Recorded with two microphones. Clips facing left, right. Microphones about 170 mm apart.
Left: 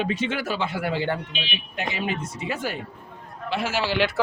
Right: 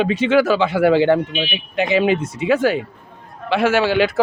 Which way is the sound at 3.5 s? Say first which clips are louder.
Right 9 dB; 70° right (ahead or behind).